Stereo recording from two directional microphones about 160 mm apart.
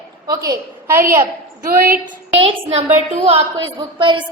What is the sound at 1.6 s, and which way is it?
Speech, 75° right (ahead or behind).